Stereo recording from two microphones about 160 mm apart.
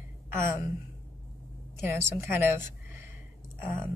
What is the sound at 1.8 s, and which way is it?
Speech, 15° right (ahead or behind).